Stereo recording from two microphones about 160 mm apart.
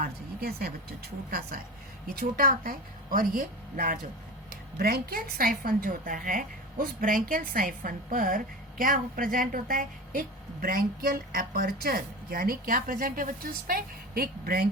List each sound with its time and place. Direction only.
0.0 s a woman's voice: 75° right (ahead or behind); by 3.9 s 55° right (ahead or behind)
4.8 s a woman's voice: 75° right (ahead or behind)